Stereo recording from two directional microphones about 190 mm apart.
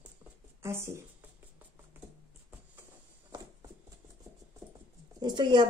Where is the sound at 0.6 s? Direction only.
15° right (ahead or behind).